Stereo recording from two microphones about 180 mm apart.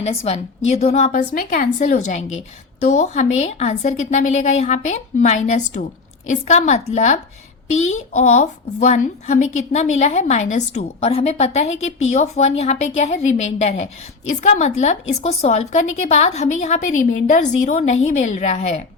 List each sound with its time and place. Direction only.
0.0 s speech: 35° left (ahead or behind)